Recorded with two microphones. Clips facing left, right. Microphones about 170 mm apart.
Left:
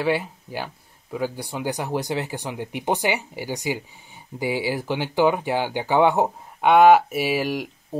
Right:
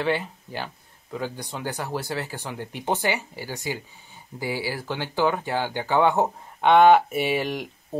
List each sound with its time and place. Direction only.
0.0 s speech: 10° left (ahead or behind)